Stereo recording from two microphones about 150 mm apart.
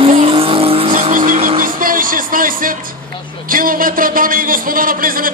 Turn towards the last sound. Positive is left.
turn(degrees=-70)  # may be behind; listen again after turning